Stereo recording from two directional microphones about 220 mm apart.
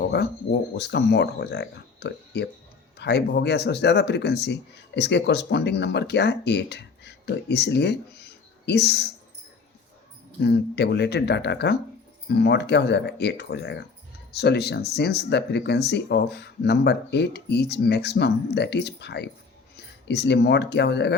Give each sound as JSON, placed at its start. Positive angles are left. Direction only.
{"t": 0.0, "sound": "a sound", "side_deg": 50}
{"t": 0.8, "sound": "speech", "side_deg": 50}
{"t": 10.4, "sound": "speech", "side_deg": 50}